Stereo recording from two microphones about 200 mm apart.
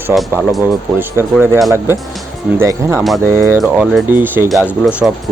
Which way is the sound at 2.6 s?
15° right (ahead or behind).